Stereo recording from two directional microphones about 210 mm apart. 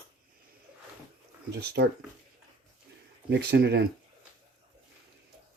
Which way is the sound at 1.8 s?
55° right (ahead or behind).